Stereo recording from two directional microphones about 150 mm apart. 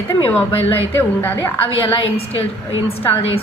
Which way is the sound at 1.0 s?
15° left (ahead or behind).